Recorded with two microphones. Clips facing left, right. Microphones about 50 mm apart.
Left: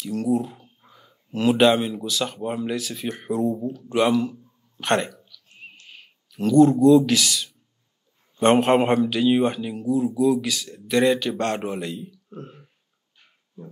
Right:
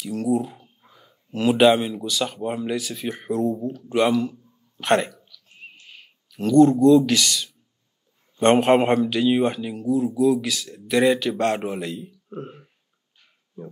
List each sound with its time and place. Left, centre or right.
0.0 s speech: centre
3.7 s a sound: centre
8.4 s speech: centre
12.3 s speech: centre